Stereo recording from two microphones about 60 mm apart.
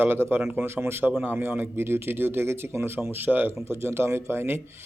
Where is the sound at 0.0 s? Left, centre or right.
Right.